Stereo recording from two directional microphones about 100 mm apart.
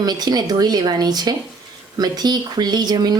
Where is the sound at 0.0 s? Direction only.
45° right (ahead or behind).